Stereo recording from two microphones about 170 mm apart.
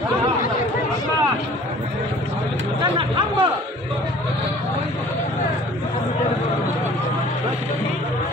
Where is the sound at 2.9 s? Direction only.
30° right (ahead or behind).